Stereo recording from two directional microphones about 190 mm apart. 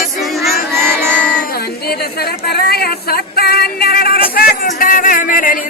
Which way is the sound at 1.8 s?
55° left (ahead or behind).